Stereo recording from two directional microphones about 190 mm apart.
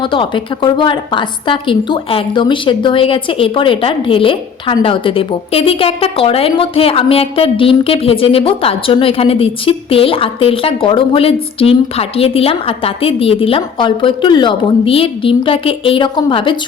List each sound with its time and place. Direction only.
0.0 s a woman's voice: 25° left (ahead or behind)